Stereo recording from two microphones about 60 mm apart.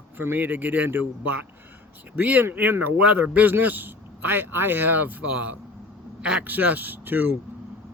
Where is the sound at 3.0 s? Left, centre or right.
Right.